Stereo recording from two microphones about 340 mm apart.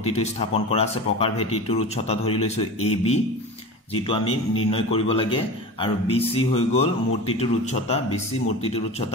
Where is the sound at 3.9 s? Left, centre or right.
Centre.